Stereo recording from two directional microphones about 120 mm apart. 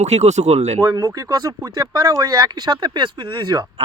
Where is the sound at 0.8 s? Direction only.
25° right (ahead or behind).